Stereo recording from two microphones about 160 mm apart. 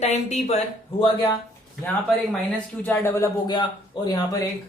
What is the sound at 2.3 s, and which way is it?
Speech, 10° left (ahead or behind).